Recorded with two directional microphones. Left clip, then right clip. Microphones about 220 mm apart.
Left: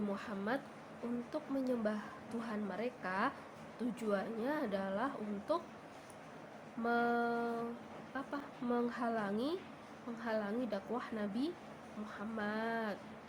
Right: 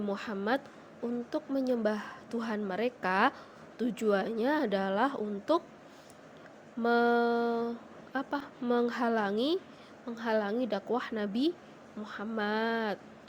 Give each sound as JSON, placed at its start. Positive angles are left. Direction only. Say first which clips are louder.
{"t": 0.1, "sound": "a woman's voice", "louder": "right 11 dB", "side_deg": -35}
{"t": 6.8, "sound": "a woman's voice", "louder": "right 8 dB", "side_deg": -35}